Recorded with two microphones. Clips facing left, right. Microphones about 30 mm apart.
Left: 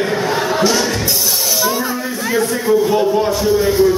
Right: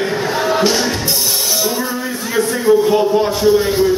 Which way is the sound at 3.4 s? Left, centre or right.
Centre.